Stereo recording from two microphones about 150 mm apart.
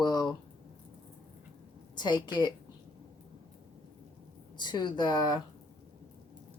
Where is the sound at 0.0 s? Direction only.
25° left (ahead or behind).